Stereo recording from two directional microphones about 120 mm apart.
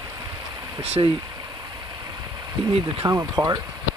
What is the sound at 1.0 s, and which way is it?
Speech, 40° right (ahead or behind).